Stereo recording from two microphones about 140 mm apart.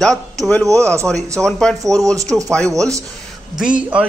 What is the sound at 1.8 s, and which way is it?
Speech, 25° right (ahead or behind).